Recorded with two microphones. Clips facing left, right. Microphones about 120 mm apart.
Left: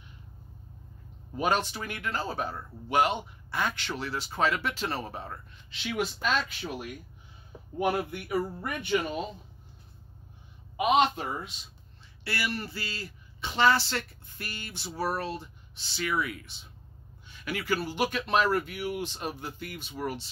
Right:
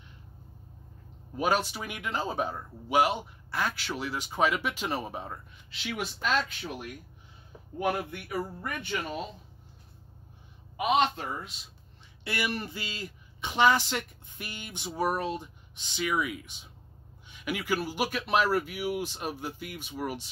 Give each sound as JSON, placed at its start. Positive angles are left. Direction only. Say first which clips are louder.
{"t": 1.3, "sound": "a man's voice", "louder": "even", "side_deg": -5}
{"t": 7.8, "sound": "speech", "louder": "left 2 dB", "side_deg": 5}
{"t": 11.0, "sound": "speech", "louder": "left 2 dB", "side_deg": 10}
{"t": 12.3, "sound": "a man's voice", "louder": "right 1 dB", "side_deg": -20}